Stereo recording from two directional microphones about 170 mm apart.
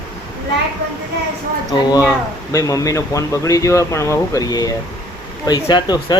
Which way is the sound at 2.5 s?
20° left (ahead or behind).